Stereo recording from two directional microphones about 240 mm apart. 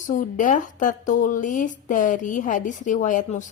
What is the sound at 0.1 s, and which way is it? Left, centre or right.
A woman's voice, left.